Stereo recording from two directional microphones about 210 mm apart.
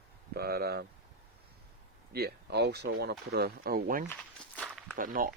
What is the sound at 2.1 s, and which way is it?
Speech, 50° right (ahead or behind).